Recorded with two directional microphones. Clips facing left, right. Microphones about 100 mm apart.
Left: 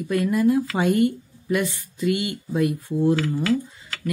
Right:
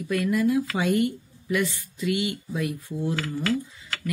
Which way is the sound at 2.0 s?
45° left (ahead or behind).